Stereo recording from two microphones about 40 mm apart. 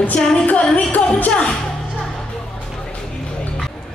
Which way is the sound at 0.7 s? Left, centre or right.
Left.